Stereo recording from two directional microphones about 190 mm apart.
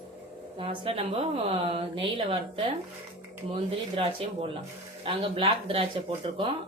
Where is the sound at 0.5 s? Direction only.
30° right (ahead or behind).